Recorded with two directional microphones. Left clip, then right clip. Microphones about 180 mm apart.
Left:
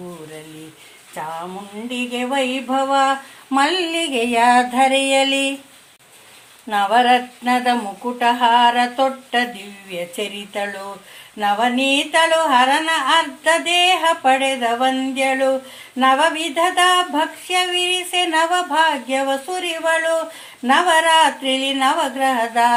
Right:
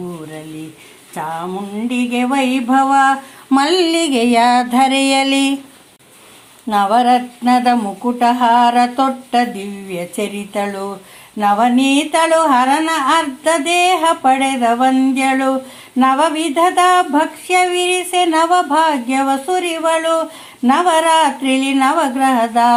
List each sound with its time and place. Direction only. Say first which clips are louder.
1.9 s speech: right 4 dB; 20° right (ahead or behind)
6.7 s speech: right 2 dB; 30° right (ahead or behind)